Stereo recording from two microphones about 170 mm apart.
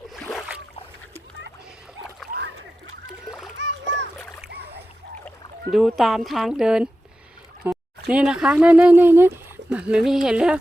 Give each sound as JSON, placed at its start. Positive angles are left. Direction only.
{"t": 0.1, "sound": "boat", "side_deg": 0}
{"t": 3.2, "sound": "splash", "side_deg": 0}
{"t": 3.7, "sound": "splash", "side_deg": -90}
{"t": 5.7, "sound": "speech", "side_deg": 0}
{"t": 7.6, "sound": "a sound", "side_deg": -10}
{"t": 8.1, "sound": "speech", "side_deg": -5}